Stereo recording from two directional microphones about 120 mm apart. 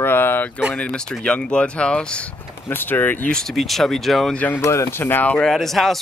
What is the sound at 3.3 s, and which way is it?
Speech, centre (ahead or behind).